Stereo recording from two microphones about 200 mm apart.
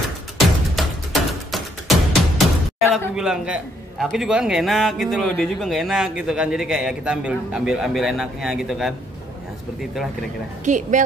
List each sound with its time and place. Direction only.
0.7 s music: centre (ahead or behind)
3.2 s a man's voice: 5° right (ahead or behind)
10.6 s speech: 40° right (ahead or behind)